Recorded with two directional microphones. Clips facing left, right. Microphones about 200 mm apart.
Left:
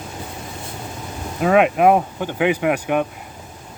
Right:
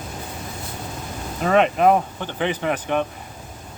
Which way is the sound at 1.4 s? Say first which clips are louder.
Left 3 dB; 5° left (ahead or behind).